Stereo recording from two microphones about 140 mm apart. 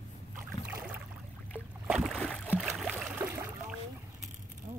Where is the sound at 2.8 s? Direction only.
Centre (ahead or behind).